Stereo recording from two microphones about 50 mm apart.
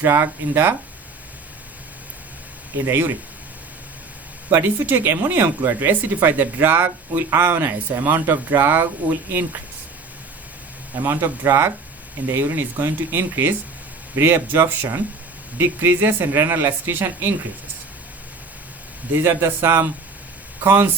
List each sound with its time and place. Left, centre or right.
0.0 s speech: right
2.7 s speech: right
4.5 s speech: right
11.0 s speech: right
19.1 s speech: right
20.7 s speech: right